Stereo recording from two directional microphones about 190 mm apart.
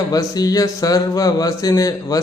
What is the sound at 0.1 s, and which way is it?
A man's voice, 20° left (ahead or behind).